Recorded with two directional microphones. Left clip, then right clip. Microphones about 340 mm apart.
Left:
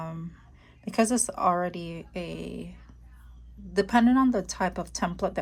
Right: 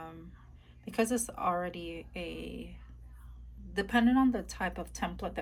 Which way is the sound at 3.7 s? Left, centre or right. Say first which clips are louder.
Left 6 dB; centre.